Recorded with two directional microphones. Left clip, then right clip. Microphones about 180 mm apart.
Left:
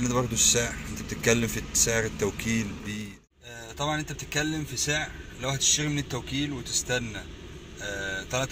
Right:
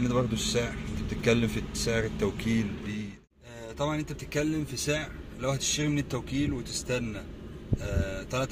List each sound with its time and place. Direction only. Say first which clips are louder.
0.0 s a man's voice: left 3 dB; centre (ahead or behind)